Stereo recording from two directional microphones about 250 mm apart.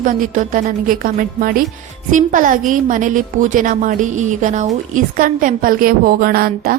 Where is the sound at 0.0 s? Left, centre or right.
Right.